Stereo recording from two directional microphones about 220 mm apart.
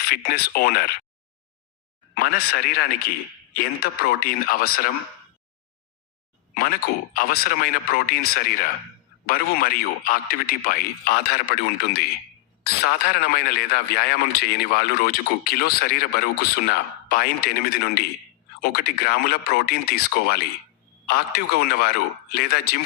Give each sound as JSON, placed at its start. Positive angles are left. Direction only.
{"t": 0.0, "sound": "a man's voice", "side_deg": 45}
{"t": 2.1, "sound": "a man's voice", "side_deg": 45}
{"t": 4.0, "sound": "speech", "side_deg": 40}
{"t": 6.5, "sound": "a man's voice", "side_deg": 40}